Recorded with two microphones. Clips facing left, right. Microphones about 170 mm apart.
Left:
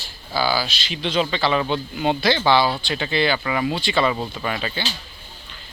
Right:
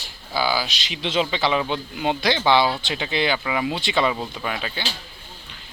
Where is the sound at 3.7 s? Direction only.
20° right (ahead or behind).